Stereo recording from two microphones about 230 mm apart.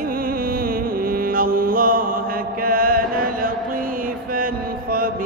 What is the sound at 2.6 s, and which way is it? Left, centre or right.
Chant, right.